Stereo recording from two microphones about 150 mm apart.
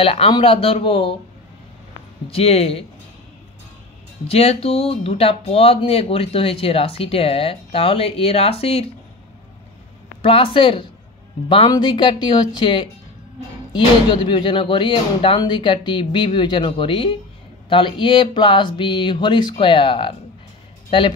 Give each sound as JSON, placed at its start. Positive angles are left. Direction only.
{"t": 0.0, "sound": "speech", "side_deg": 35}
{"t": 2.3, "sound": "speech", "side_deg": 40}
{"t": 4.3, "sound": "speech", "side_deg": 40}
{"t": 10.2, "sound": "speech", "side_deg": 35}